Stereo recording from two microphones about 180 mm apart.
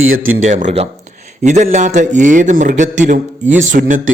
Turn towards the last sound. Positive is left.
turn(degrees=-45)  # may be behind; listen again after turning